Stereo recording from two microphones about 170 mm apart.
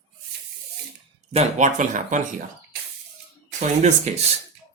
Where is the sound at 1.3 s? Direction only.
40° right (ahead or behind).